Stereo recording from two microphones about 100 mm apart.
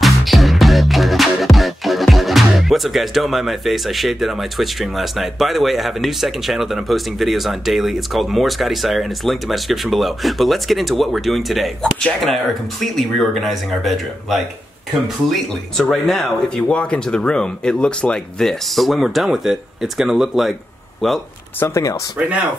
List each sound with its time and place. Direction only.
0.0 s music: centre (ahead or behind)
21.5 s speech: 25° left (ahead or behind)